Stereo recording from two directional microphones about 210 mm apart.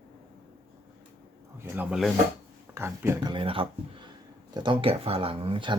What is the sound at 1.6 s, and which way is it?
A man's voice, 5° right (ahead or behind).